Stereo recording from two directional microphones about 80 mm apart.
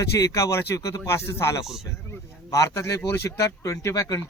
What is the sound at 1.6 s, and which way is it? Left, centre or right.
Speech, centre.